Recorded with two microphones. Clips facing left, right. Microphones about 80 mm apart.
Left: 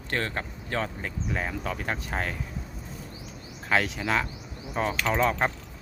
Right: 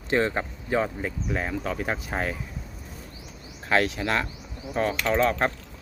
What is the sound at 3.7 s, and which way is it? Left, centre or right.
Speech, centre.